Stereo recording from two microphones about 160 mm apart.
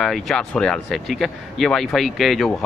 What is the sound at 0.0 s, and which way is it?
Speech, 5° left (ahead or behind).